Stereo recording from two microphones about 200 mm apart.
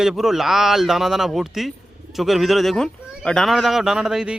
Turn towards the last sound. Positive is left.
turn(degrees=-5)  # may be behind; listen again after turning